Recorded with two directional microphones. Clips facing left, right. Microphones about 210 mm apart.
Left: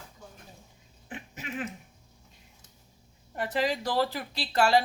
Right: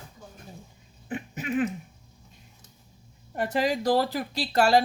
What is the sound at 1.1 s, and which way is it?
Dog, 50° right (ahead or behind).